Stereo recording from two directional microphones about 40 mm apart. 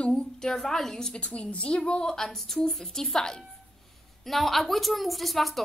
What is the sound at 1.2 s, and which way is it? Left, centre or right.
A woman's voice, left.